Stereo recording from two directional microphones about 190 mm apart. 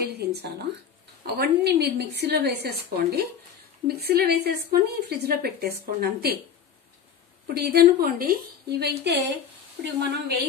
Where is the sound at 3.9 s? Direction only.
55° right (ahead or behind).